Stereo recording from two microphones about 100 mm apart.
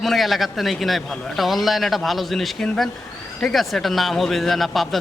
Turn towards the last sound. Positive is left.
turn(degrees=0)  # may be behind; listen again after turning